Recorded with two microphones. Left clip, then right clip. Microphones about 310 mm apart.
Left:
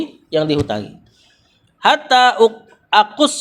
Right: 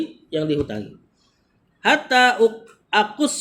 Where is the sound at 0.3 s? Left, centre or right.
Centre.